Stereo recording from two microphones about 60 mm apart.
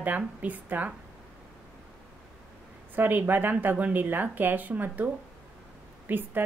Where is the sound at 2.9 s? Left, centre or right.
Right.